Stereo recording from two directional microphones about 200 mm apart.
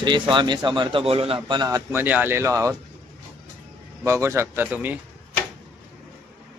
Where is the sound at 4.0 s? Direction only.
15° right (ahead or behind).